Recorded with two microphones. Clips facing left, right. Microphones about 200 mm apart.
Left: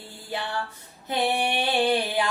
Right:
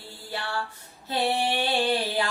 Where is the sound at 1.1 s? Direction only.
20° left (ahead or behind).